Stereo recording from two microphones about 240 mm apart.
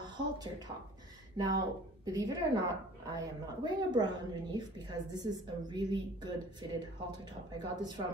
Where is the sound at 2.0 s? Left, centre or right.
Centre.